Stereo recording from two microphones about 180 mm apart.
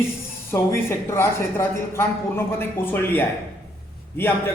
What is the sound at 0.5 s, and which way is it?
Speech, 15° left (ahead or behind).